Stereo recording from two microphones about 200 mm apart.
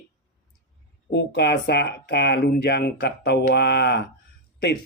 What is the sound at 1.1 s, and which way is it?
Speech, 55° left (ahead or behind).